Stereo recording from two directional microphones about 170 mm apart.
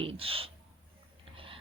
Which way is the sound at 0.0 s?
35° right (ahead or behind).